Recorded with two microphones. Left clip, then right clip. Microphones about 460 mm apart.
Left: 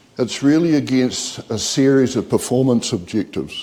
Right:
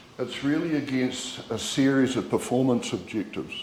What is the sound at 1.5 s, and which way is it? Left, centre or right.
Speech, left.